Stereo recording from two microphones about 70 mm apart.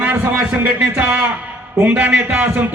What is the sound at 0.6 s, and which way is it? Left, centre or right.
A man's voice, centre.